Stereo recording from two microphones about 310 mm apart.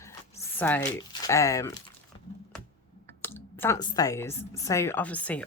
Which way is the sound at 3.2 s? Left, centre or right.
Centre.